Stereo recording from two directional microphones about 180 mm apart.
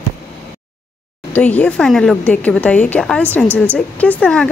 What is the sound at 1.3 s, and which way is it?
A woman's voice, 5° left (ahead or behind).